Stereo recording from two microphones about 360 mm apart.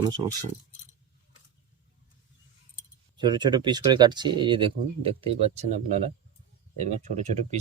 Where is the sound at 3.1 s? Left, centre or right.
Centre.